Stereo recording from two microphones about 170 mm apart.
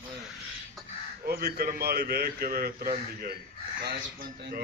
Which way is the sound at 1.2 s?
65° right (ahead or behind).